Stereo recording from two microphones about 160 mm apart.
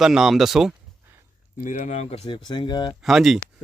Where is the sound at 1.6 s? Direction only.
50° left (ahead or behind).